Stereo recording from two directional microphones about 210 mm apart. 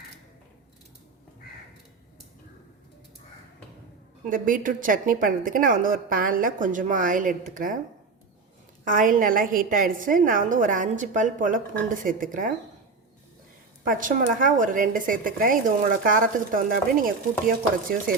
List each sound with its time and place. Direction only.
4.3 s speech: 40° right (ahead or behind)
8.8 s speech: 40° right (ahead or behind)
13.8 s speech: 40° right (ahead or behind)